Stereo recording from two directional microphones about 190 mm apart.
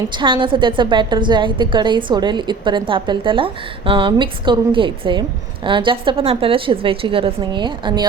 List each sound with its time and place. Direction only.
0.2 s a woman's voice: 25° right (ahead or behind)